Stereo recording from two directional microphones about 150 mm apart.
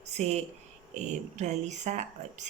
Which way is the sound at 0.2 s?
45° right (ahead or behind).